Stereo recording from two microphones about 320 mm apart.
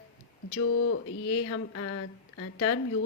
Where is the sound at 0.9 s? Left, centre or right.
Left.